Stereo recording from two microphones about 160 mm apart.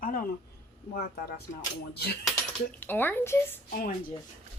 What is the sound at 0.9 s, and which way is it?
Speech, 75° left (ahead or behind).